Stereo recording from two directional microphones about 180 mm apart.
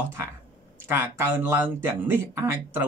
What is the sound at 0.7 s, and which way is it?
Speech, 10° right (ahead or behind).